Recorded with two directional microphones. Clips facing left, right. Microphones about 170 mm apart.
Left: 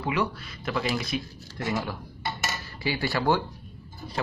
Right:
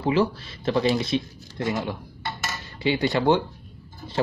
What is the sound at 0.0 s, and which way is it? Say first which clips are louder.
Speech: right 6 dB; 30° right (ahead or behind).